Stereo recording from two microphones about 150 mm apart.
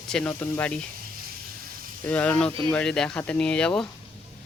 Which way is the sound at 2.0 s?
10° left (ahead or behind).